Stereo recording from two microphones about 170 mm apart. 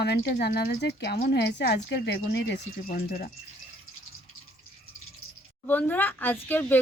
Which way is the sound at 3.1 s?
55° left (ahead or behind).